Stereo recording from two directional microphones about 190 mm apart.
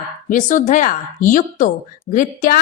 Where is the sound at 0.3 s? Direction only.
40° left (ahead or behind).